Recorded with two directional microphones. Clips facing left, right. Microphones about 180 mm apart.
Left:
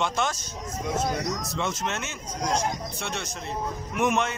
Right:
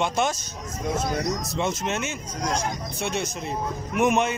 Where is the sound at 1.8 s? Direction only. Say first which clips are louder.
Right 4 dB; 15° right (ahead or behind).